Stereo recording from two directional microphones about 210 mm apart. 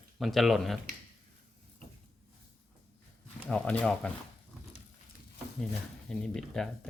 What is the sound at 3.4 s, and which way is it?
Speech, 5° left (ahead or behind).